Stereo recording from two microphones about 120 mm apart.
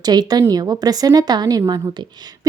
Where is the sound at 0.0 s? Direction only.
35° right (ahead or behind).